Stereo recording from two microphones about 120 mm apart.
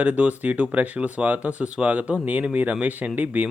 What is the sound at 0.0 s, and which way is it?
Speech, 10° right (ahead or behind).